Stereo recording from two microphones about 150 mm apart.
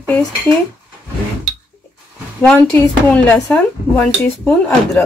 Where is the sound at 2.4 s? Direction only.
15° left (ahead or behind).